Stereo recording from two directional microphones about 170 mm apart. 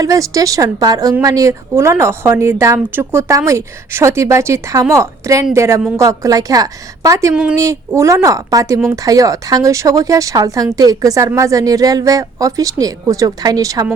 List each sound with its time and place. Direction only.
0.0 s speech: 20° right (ahead or behind)